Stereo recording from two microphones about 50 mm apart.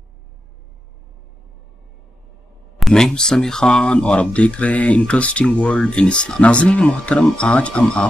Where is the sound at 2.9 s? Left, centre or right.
Centre.